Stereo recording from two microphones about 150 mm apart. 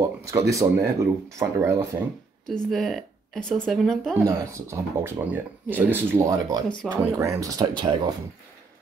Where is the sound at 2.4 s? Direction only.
5° left (ahead or behind).